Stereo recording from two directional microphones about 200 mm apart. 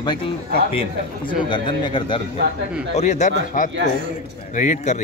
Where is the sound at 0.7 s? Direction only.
30° left (ahead or behind).